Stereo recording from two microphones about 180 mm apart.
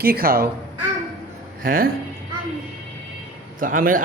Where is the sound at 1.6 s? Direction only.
50° right (ahead or behind).